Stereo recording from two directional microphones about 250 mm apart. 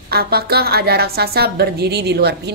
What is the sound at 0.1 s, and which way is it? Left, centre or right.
A woman's voice, right.